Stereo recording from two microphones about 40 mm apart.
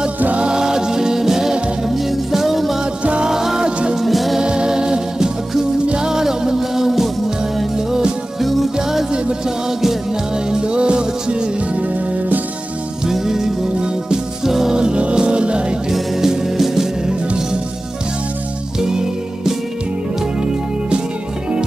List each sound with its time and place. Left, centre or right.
0.4 s music: centre
2.8 s music: right
3.3 s music: centre
4.0 s music: centre
4.4 s music: right
8.4 s music: centre
8.7 s music: centre
11.7 s music: right
13.0 s music: centre
14.8 s music: right
15.9 s music: centre
17.0 s music: right
18.8 s music: centre